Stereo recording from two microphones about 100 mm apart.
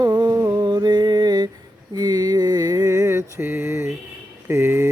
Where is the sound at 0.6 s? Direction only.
45° right (ahead or behind); by 3.9 s 25° right (ahead or behind).